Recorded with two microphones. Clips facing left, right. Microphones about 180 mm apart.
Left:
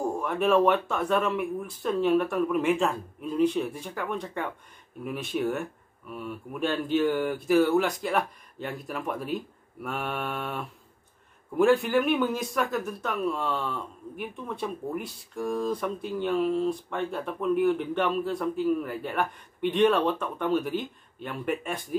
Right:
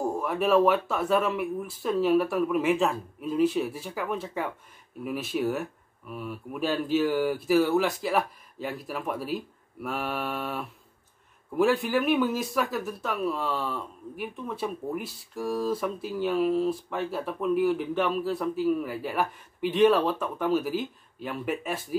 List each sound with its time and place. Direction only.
0.0 s speech: 5° right (ahead or behind)